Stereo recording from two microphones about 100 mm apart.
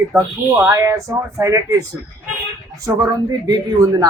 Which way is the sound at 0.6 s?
30° right (ahead or behind).